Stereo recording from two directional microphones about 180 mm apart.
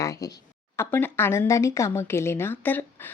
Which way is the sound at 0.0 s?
20° left (ahead or behind).